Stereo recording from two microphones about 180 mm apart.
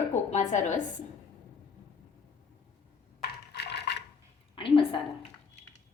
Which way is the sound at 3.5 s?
65° left (ahead or behind).